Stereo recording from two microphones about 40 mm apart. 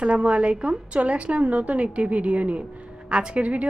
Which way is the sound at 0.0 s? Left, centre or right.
Right.